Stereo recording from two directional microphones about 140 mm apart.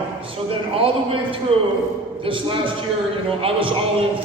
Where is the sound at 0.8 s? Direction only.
40° right (ahead or behind).